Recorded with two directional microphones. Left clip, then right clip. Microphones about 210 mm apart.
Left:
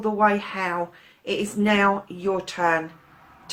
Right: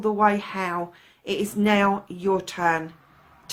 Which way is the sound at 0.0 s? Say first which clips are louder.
Even; 40° right (ahead or behind).